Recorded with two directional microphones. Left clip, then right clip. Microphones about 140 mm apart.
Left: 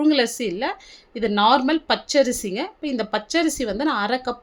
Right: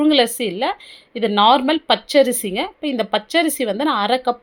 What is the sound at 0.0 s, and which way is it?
A woman's voice, 15° right (ahead or behind).